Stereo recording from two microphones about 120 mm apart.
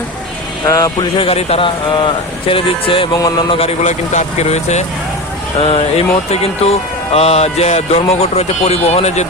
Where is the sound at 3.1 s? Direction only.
35° left (ahead or behind); by 4.8 s 70° left (ahead or behind).